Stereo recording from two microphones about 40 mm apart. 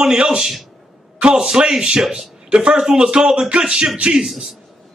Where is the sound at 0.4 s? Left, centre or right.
Centre.